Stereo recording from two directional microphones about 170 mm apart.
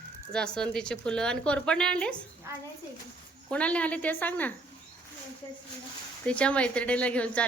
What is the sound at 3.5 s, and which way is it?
A woman's voice, 5° left (ahead or behind).